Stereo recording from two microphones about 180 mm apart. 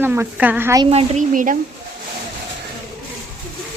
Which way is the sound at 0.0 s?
10° right (ahead or behind).